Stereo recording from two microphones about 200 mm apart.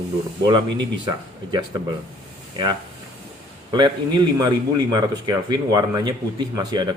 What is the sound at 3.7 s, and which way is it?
Speech, 20° right (ahead or behind).